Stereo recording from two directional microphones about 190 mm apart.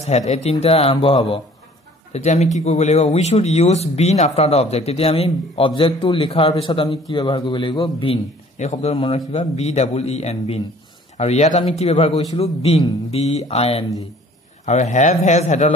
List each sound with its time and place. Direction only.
0.3 s a man's voice: 35° left (ahead or behind)